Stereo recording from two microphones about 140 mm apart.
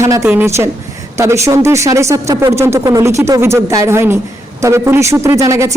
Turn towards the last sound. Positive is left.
turn(degrees=-20)  # may be behind; listen again after turning